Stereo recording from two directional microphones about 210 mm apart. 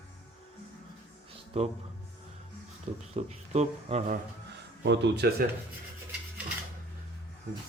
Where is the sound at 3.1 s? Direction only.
30° right (ahead or behind).